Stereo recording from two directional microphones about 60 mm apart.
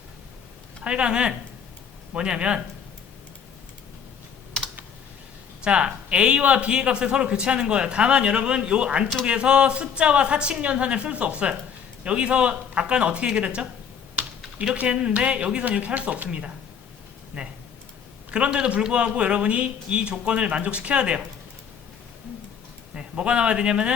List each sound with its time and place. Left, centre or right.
0.9 s a man's voice: centre
5.6 s a man's voice: centre
23.0 s a man's voice: centre